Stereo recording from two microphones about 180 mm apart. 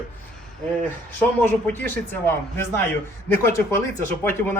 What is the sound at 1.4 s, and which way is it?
Speech, 10° left (ahead or behind).